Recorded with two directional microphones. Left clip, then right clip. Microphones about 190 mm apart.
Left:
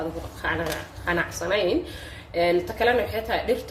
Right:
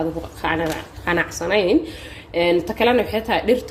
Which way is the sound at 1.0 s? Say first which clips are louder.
Right 5 dB; 40° right (ahead or behind).